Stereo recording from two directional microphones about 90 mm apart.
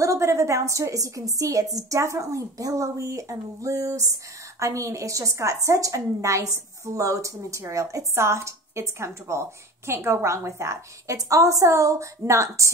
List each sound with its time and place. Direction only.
0.0 s a woman's voice: 35° right (ahead or behind)